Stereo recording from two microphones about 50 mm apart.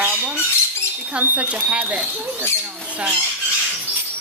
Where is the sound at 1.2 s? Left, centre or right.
Right.